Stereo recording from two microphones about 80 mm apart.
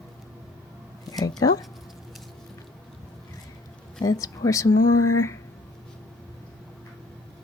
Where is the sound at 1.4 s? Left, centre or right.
Left.